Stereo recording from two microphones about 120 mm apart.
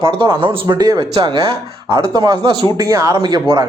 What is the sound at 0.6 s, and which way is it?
Speech, 35° right (ahead or behind).